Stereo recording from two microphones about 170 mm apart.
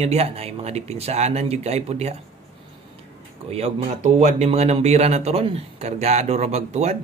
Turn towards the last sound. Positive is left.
turn(degrees=-40)  # may be behind; listen again after turning